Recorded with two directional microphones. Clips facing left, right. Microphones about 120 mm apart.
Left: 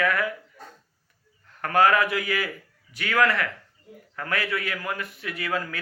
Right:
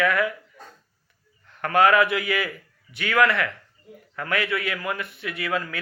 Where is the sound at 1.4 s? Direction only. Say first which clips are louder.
Right 1 dB; 35° left (ahead or behind).